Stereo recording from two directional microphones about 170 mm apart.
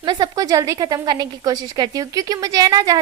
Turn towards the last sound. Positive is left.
turn(degrees=-20)  # may be behind; listen again after turning